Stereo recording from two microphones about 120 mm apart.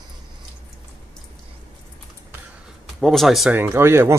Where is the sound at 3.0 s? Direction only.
Centre (ahead or behind).